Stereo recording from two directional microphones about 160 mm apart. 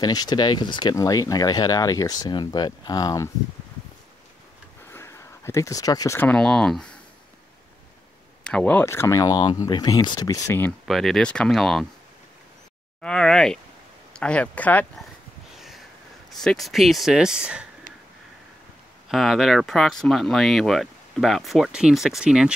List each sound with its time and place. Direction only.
0.0 s speech: 25° left (ahead or behind)
4.8 s speech: 15° left (ahead or behind)
8.5 s speech: 10° left (ahead or behind)
10.9 s speech: centre (ahead or behind)
13.0 s speech: 5° left (ahead or behind)
15.5 s a sound: centre (ahead or behind)
16.3 s speech: centre (ahead or behind)
19.0 s speech: centre (ahead or behind)